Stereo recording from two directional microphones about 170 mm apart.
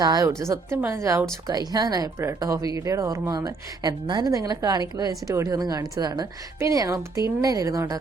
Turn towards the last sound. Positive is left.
turn(degrees=-20)  # may be behind; listen again after turning